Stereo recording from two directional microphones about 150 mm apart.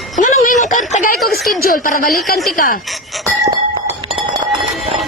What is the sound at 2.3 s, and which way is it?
Speech, centre (ahead or behind).